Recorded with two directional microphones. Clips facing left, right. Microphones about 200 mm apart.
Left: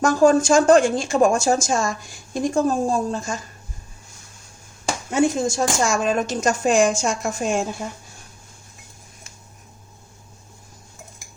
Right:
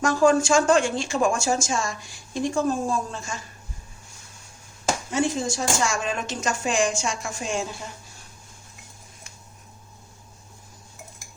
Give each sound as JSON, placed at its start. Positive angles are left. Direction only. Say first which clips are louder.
{"t": 0.0, "sound": "speech", "louder": "left 4 dB", "side_deg": 40}
{"t": 5.1, "sound": "speech", "louder": "left 7 dB", "side_deg": 50}